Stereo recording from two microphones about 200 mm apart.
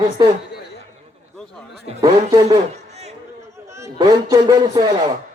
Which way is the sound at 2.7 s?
35° right (ahead or behind).